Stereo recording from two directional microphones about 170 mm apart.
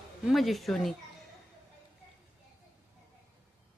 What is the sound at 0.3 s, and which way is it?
Speech, centre (ahead or behind).